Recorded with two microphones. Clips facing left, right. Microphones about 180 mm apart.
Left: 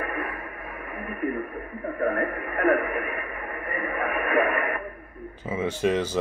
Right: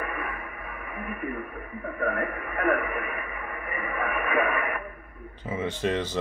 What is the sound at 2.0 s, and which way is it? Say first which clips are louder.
Speech: left 3 dB; 40° left (ahead or behind).